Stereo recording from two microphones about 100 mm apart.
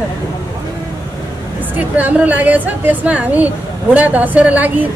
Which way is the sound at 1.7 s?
15° right (ahead or behind).